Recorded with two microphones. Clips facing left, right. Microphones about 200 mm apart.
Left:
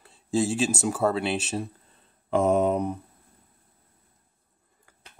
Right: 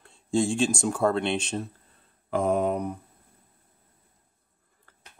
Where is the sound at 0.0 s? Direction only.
5° left (ahead or behind).